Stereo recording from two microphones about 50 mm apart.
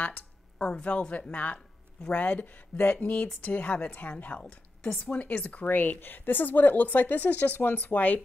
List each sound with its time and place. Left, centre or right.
0.0 s a sound: left
0.8 s speech: left
4.4 s speech: centre
5.7 s speech: left